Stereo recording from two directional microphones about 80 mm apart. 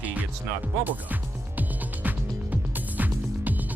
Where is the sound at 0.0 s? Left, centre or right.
Right.